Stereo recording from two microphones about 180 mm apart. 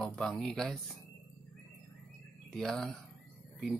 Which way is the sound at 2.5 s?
Centre (ahead or behind).